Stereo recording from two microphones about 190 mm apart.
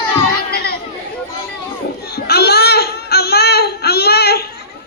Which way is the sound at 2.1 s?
55° left (ahead or behind).